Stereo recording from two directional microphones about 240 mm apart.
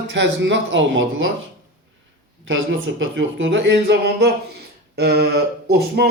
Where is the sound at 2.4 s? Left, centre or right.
Right.